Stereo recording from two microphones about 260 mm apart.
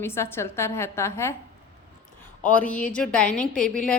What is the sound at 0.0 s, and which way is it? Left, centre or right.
A woman's voice, centre.